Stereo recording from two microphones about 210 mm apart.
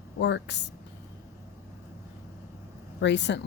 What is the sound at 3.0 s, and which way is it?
Speech, 55° left (ahead or behind).